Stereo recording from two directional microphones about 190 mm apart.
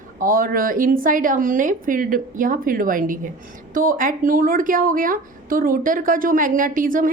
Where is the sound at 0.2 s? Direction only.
50° right (ahead or behind).